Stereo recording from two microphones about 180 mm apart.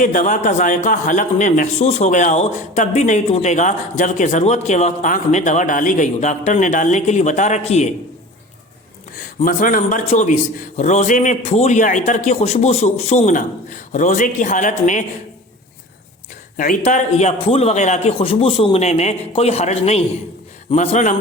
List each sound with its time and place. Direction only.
0.0 s a man's voice: 45° left (ahead or behind)
9.4 s a man's voice: 50° left (ahead or behind)
16.6 s a man's voice: 45° left (ahead or behind)